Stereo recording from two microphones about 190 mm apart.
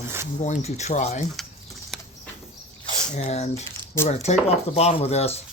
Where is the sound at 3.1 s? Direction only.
35° left (ahead or behind).